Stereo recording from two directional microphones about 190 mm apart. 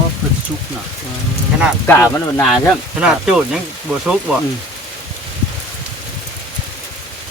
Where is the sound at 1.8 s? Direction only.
15° left (ahead or behind).